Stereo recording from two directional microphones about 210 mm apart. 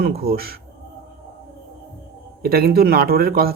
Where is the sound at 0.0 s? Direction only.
45° right (ahead or behind).